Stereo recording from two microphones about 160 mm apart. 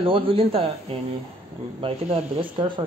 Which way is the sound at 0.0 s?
35° right (ahead or behind).